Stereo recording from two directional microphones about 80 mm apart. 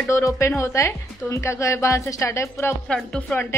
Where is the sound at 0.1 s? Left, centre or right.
Left.